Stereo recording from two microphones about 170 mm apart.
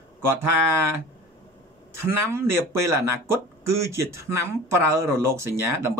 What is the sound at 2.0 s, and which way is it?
Speech, 15° right (ahead or behind).